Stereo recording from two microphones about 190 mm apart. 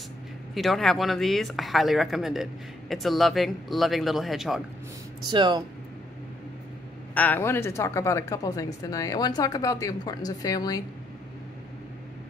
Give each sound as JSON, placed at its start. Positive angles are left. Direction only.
{"t": 0.6, "sound": "speech", "side_deg": 0}
{"t": 5.3, "sound": "speech", "side_deg": -25}
{"t": 7.2, "sound": "a woman's voice", "side_deg": 10}